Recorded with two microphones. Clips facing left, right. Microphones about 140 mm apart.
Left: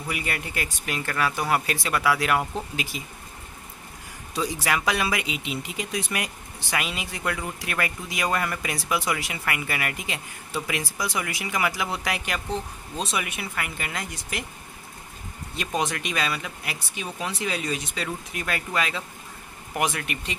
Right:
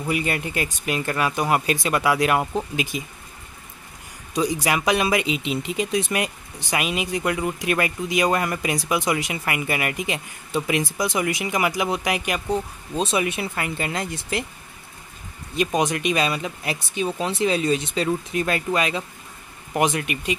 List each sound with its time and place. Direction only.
0.1 s speech: 25° right (ahead or behind)
4.3 s speech: 15° right (ahead or behind)
15.5 s speech: 20° right (ahead or behind)